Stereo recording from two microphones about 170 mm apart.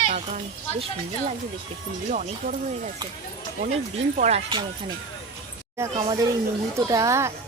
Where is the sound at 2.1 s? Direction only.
50° right (ahead or behind).